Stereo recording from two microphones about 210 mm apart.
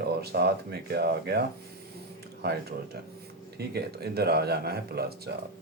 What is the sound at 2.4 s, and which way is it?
Speech, 50° right (ahead or behind).